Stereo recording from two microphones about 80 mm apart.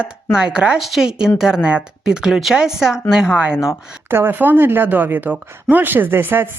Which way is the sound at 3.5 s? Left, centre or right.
Left.